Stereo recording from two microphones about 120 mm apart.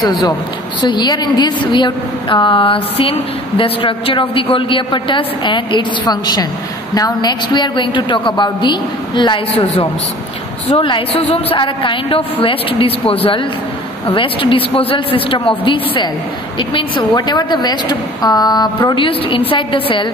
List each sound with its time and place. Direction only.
0.8 s a woman's voice: 40° left (ahead or behind)
10.8 s a woman's voice: 50° left (ahead or behind)